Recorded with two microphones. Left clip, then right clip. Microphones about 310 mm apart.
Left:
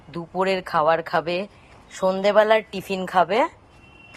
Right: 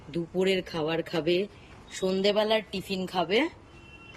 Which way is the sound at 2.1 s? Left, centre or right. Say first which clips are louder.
Left 8 dB; left.